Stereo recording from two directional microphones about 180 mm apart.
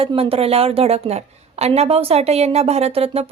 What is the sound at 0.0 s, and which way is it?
A woman's voice, 30° right (ahead or behind).